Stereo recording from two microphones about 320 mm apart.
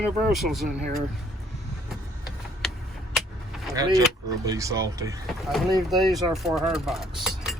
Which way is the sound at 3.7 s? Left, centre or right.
Centre.